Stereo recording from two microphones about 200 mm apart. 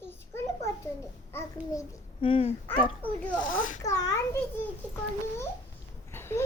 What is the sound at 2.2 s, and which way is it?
Speech, 25° left (ahead or behind).